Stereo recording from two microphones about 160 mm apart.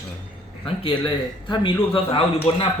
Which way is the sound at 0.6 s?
35° left (ahead or behind).